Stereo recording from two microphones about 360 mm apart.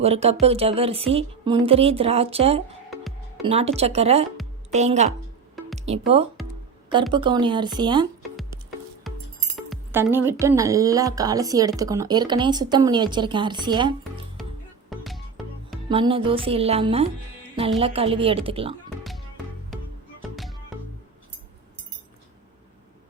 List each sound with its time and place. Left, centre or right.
0.0 s a woman's voice: centre
7.1 s speech: centre
9.1 s music: centre
9.6 s speech: centre
14.8 s music: centre
15.9 s speech: centre
20.3 s music: centre